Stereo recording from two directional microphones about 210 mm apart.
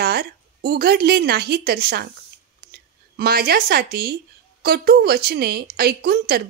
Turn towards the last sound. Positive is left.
turn(degrees=-45)  # may be behind; listen again after turning